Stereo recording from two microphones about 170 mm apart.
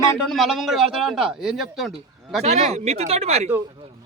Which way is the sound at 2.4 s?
40° right (ahead or behind).